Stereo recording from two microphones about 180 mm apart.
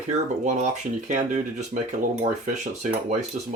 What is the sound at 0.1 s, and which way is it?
Speech, 40° right (ahead or behind).